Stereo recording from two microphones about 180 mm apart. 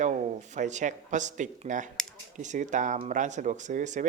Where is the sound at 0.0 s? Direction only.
40° right (ahead or behind).